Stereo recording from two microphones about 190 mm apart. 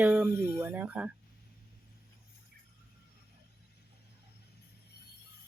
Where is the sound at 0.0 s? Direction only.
10° right (ahead or behind).